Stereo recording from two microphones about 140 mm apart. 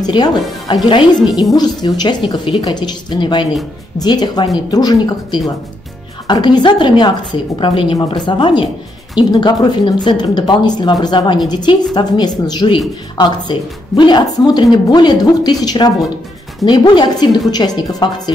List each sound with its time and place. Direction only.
0.0 s a woman's voice: 30° left (ahead or behind)